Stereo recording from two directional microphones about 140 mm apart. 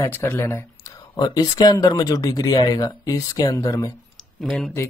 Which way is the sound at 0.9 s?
30° left (ahead or behind).